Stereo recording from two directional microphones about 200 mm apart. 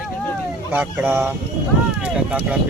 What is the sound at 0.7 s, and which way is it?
Speech, 10° right (ahead or behind).